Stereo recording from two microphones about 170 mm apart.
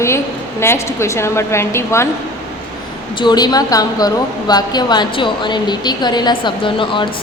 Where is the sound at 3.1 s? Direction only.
25° left (ahead or behind).